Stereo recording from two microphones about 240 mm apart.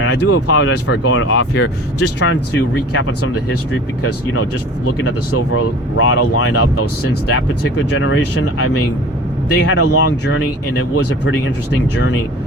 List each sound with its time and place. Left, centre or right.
0.2 s speech: left
2.0 s speech: left
5.0 s speech: left
7.9 s speech: left
9.5 s speech: left